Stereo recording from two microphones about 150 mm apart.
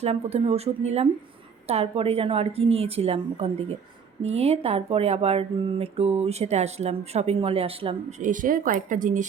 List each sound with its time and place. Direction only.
0.0 s a woman's voice: 45° right (ahead or behind)
4.2 s speech: 45° right (ahead or behind)
8.2 s speech: 60° right (ahead or behind)